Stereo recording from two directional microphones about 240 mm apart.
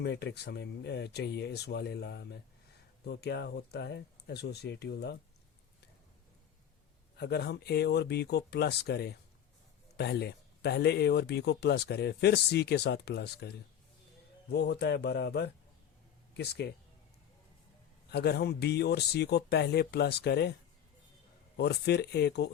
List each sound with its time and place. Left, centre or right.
0.0 s speech: left
7.2 s speech: left
14.5 s speech: left
18.1 s speech: left
21.6 s speech: left